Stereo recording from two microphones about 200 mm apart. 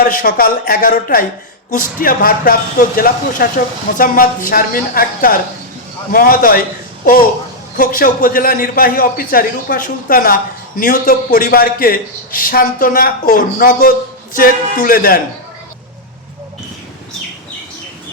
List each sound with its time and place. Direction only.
0.0 s a man's voice: 45° left (ahead or behind)